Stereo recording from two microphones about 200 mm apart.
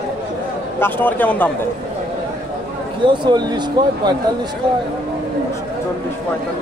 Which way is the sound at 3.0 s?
20° right (ahead or behind).